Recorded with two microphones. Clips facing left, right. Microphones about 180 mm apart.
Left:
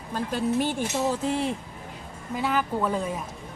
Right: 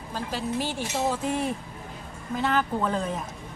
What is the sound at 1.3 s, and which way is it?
Speech, 30° left (ahead or behind).